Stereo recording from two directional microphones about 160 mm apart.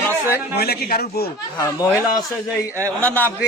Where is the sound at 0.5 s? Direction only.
85° left.